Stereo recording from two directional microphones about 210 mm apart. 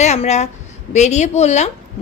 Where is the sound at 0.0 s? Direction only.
30° left (ahead or behind).